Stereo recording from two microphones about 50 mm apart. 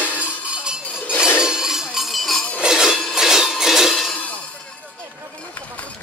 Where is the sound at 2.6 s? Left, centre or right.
Centre.